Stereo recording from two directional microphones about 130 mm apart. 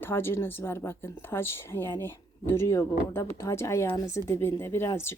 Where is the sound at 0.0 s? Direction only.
20° left (ahead or behind).